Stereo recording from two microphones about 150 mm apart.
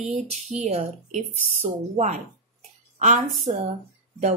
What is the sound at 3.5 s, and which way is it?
Speech, 40° right (ahead or behind).